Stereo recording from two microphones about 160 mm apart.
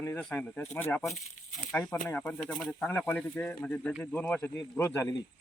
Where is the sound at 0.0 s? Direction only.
10° left (ahead or behind).